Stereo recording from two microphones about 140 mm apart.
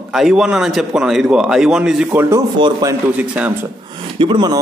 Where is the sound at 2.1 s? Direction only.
20° right (ahead or behind).